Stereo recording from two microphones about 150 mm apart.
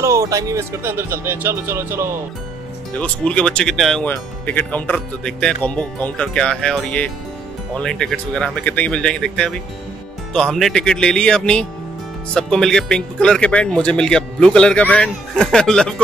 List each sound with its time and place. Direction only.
0.0 s speech: 20° right (ahead or behind)
2.9 s speech: 10° left (ahead or behind)